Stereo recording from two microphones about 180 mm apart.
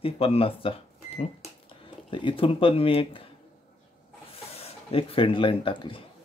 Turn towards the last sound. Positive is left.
turn(degrees=30)  # may be behind; listen again after turning